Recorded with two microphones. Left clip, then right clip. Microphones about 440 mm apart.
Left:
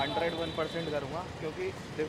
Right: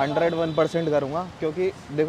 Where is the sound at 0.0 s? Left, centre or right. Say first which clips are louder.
Right 9 dB; right.